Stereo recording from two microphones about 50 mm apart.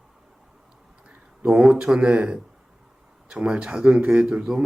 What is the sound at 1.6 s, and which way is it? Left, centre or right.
Speech, centre.